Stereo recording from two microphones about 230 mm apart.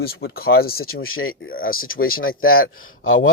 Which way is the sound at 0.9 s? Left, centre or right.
Left.